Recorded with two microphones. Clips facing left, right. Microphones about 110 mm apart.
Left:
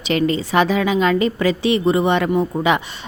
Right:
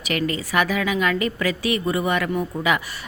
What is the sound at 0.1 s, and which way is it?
A woman's voice, 25° left (ahead or behind).